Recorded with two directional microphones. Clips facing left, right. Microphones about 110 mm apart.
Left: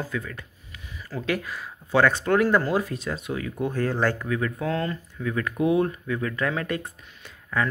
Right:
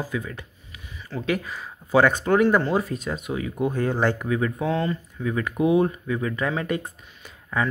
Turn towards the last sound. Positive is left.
turn(degrees=-5)  # may be behind; listen again after turning